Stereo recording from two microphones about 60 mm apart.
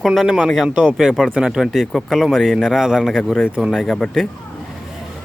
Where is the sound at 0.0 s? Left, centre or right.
Centre.